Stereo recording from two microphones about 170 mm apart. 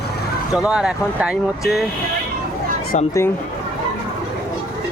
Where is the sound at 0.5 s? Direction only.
5° right (ahead or behind).